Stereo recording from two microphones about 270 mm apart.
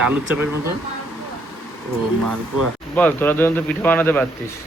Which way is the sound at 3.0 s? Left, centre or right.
Centre.